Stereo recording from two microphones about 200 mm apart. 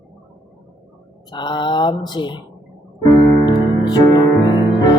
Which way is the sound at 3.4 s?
20° left (ahead or behind).